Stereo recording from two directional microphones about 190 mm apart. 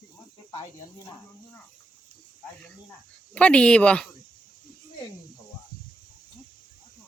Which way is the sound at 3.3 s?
5° left (ahead or behind).